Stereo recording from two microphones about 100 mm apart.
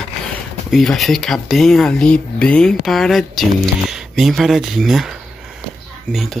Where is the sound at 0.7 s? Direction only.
Centre (ahead or behind).